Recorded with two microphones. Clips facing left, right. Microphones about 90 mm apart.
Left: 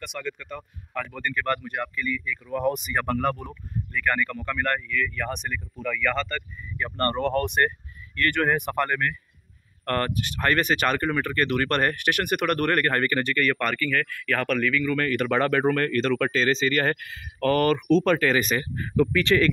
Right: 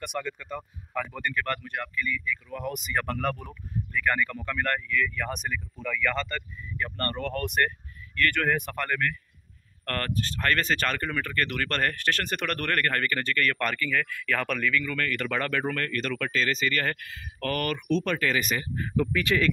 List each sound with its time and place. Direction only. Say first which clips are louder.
0.2 s speech: left 1 dB; 15° right (ahead or behind)
1.4 s speech: left 7 dB; 10° left (ahead or behind)
2.0 s speech: left 1 dB; 35° left (ahead or behind)
2.7 s speech: left 3 dB; 15° left (ahead or behind)
3.2 s speech: left 4 dB; centre (ahead or behind)
6.8 s speech: left 6 dB; 25° left (ahead or behind); by 14.9 s centre (ahead or behind)
14.9 s speech: left 6 dB; 20° left (ahead or behind); by 18.6 s 40° left (ahead or behind)
18.6 s speech: left 4 dB; 70° left (ahead or behind)